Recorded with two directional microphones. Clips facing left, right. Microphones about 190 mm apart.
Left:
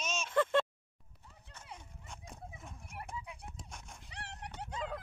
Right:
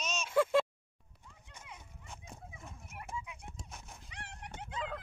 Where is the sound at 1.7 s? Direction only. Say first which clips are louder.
Left 2 dB; centre (ahead or behind).